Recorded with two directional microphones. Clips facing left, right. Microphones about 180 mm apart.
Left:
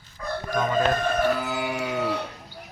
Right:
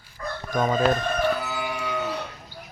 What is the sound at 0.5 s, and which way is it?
Chicken, 50° right (ahead or behind).